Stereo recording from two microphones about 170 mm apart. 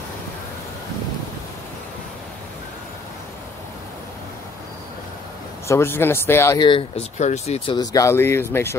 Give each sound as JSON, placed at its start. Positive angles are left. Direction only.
{"t": 5.7, "sound": "speech", "side_deg": 15}
{"t": 6.6, "sound": "speech", "side_deg": 30}
{"t": 7.2, "sound": "speech", "side_deg": 40}
{"t": 7.7, "sound": "speech", "side_deg": 20}